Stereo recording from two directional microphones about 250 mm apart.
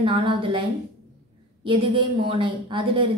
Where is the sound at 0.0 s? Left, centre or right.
Centre.